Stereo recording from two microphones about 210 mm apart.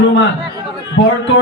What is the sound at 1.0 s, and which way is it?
Speech, 60° left (ahead or behind).